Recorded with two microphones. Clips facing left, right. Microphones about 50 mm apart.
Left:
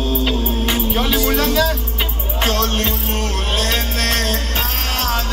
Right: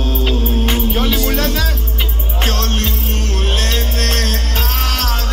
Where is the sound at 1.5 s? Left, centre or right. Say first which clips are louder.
Left 4 dB; right.